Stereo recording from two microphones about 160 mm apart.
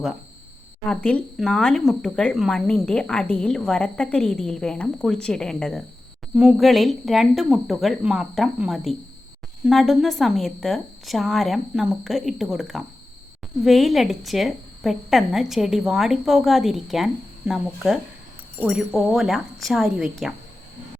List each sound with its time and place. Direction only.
0.9 s speech: 5° left (ahead or behind)